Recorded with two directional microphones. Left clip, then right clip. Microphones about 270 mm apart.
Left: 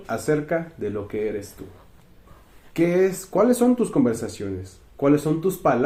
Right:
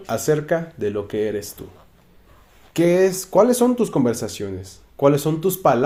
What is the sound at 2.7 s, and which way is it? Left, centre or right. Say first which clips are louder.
Speech: right 3 dB; right.